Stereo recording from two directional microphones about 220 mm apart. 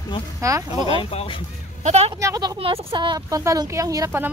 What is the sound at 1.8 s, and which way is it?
Speech, 30° right (ahead or behind).